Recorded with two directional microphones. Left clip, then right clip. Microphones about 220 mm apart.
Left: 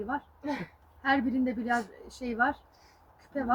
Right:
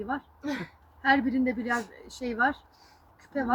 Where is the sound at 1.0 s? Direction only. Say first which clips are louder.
Right 3 dB; centre (ahead or behind).